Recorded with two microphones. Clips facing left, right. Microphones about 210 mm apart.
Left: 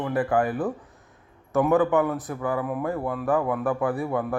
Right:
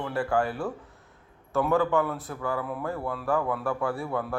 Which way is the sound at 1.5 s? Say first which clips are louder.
Left 4 dB; 20° left (ahead or behind).